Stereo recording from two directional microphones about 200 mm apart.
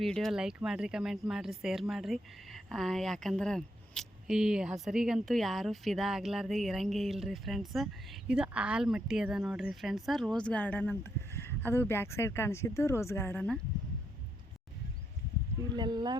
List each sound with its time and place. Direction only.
0.0 s speech: centre (ahead or behind)
15.7 s speech: 20° right (ahead or behind)